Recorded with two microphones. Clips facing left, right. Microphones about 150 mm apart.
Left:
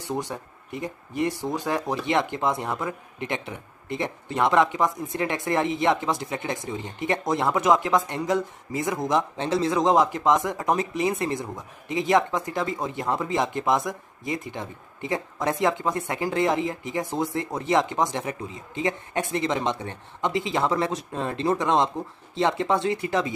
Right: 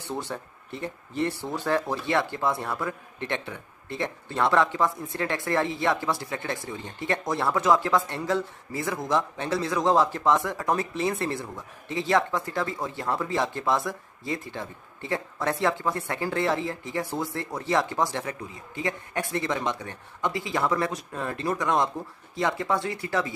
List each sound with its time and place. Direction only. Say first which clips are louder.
0.1 s speech: left 3 dB; 15° left (ahead or behind)